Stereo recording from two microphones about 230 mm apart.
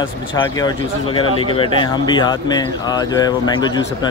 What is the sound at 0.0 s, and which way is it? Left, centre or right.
Speech, left.